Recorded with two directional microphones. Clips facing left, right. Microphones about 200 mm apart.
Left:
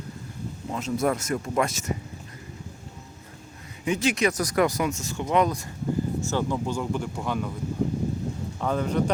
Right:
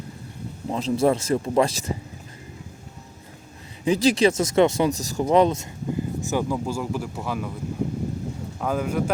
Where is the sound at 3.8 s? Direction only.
35° right (ahead or behind).